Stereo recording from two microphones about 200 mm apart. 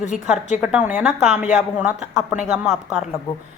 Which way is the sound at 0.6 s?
5° right (ahead or behind).